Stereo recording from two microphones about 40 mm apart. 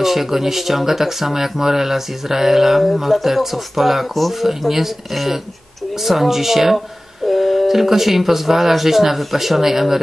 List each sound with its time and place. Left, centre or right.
0.0 s speech: centre